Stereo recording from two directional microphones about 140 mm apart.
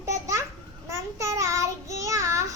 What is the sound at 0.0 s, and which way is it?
Babbling, 20° right (ahead or behind).